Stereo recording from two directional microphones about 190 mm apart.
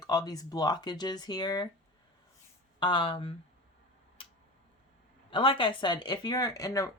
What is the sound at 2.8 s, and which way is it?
Speech, 25° left (ahead or behind).